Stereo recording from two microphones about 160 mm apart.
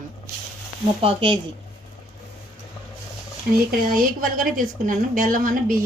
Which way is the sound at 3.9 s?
60° right (ahead or behind).